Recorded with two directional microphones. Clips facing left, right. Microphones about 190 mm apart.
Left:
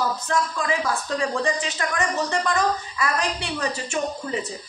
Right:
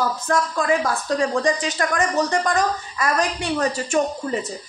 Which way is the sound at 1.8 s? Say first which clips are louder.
Right 6 dB; 45° right (ahead or behind).